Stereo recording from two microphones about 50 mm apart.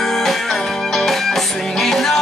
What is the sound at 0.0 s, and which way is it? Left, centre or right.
Music, centre.